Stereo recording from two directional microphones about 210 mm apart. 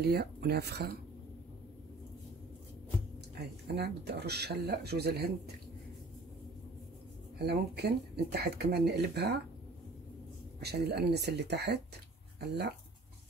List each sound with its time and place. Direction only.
0.0 s speech: 50° right (ahead or behind)
3.3 s speech: 50° right (ahead or behind)
7.3 s speech: 50° right (ahead or behind)
10.6 s speech: 50° right (ahead or behind)